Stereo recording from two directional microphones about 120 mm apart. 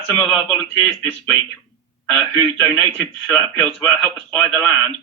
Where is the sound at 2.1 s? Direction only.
15° left (ahead or behind).